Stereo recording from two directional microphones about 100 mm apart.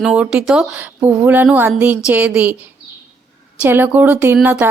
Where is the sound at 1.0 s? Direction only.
20° right (ahead or behind).